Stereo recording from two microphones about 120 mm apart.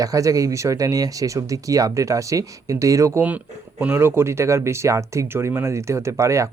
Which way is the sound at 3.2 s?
10° right (ahead or behind).